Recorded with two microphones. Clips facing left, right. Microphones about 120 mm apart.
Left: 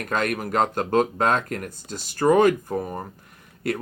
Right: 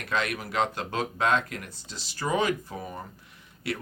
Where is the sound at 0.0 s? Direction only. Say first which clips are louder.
Left 5 dB; 45° left (ahead or behind).